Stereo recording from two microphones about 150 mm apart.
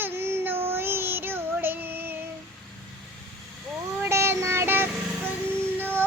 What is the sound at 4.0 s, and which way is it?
Child singing, 15° right (ahead or behind).